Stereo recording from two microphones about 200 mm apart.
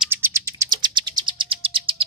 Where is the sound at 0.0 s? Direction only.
10° right (ahead or behind).